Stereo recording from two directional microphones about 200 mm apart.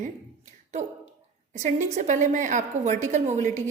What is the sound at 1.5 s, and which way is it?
A woman's voice, 35° right (ahead or behind).